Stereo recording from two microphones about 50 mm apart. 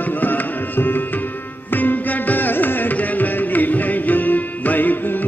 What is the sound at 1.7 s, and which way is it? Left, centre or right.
Music, left.